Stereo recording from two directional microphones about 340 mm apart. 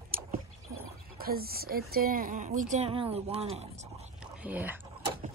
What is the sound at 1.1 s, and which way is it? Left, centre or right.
Speech, right.